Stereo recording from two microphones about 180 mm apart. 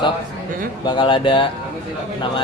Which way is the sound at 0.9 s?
25° left (ahead or behind).